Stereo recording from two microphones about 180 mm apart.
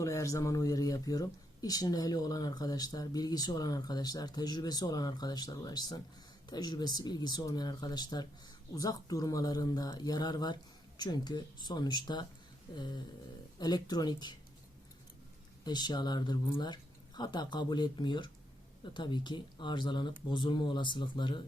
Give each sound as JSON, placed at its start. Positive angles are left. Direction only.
{"t": 0.0, "sound": "speech", "side_deg": 15}
{"t": 15.6, "sound": "speech", "side_deg": 25}